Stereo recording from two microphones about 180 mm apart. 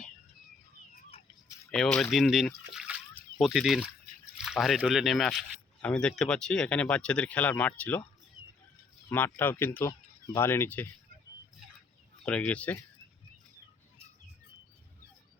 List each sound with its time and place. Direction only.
1.1 s a sound: 35° left (ahead or behind)
1.7 s speech: 5° left (ahead or behind)
2.7 s trickle: 5° right (ahead or behind)
4.4 s speech: centre (ahead or behind)
9.0 s speech: 10° left (ahead or behind)
12.2 s speech: 5° left (ahead or behind)